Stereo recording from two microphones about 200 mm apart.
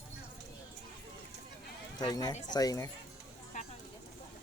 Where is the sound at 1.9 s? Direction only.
20° left (ahead or behind).